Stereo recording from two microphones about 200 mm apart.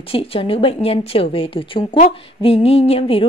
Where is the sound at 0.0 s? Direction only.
30° left (ahead or behind).